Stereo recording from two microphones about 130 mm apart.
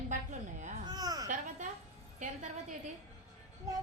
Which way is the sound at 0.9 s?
30° right (ahead or behind).